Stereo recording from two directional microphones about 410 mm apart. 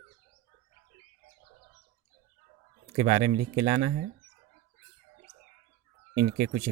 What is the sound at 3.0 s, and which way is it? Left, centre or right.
Speech, centre.